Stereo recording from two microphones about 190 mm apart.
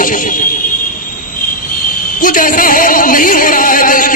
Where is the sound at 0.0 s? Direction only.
45° left (ahead or behind).